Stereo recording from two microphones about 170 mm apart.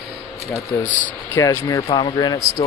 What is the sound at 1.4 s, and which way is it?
Speech, 20° left (ahead or behind).